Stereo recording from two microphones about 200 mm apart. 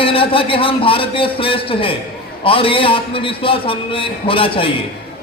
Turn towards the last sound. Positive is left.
turn(degrees=25)  # may be behind; listen again after turning